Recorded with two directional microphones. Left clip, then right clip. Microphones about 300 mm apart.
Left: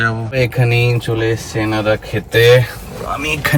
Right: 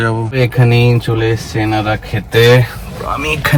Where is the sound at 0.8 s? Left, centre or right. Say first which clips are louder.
Right 2 dB; right.